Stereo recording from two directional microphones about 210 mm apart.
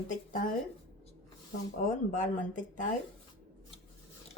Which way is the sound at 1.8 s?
40° left (ahead or behind).